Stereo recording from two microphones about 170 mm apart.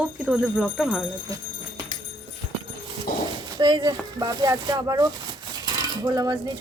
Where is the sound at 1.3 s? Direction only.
20° right (ahead or behind).